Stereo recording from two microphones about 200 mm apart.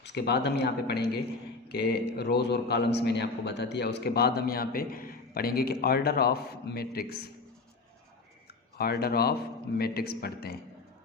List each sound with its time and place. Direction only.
0.0 s a man's voice: 60° left (ahead or behind)
8.8 s a man's voice: 50° left (ahead or behind)